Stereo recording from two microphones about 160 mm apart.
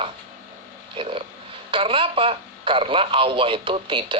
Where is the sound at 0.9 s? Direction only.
35° right (ahead or behind).